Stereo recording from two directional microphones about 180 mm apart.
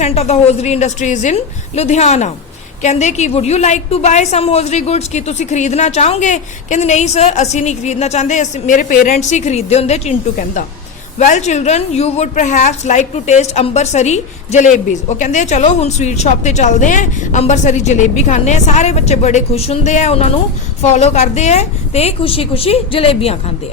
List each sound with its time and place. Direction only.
0.0 s a woman's voice: 35° left (ahead or behind)